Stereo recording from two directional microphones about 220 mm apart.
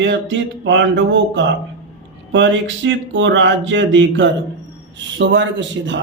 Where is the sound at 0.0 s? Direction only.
55° right (ahead or behind).